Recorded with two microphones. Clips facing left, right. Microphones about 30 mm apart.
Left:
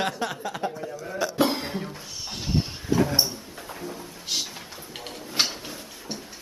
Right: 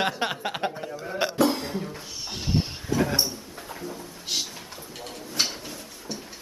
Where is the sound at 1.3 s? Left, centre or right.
Left.